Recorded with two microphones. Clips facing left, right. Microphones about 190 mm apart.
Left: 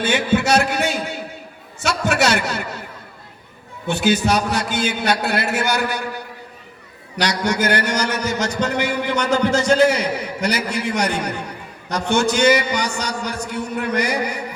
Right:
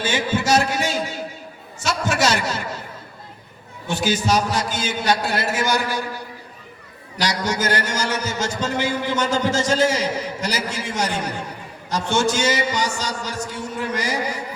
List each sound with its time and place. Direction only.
0.0 s a man's voice: 65° left (ahead or behind)
3.8 s a man's voice: 65° left (ahead or behind)
7.2 s a man's voice: 65° left (ahead or behind)